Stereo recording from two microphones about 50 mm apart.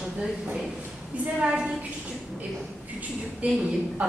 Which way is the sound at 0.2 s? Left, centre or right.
Centre.